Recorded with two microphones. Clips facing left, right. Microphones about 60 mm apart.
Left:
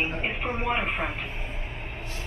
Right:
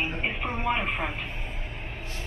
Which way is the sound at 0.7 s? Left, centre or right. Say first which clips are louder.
Right 1 dB; centre.